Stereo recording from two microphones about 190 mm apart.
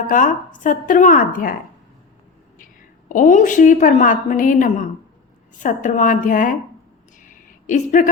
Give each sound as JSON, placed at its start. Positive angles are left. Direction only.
{"t": 0.1, "sound": "a woman's voice", "side_deg": 45}
{"t": 3.1, "sound": "a woman's voice", "side_deg": 40}
{"t": 7.2, "sound": "a sound", "side_deg": 45}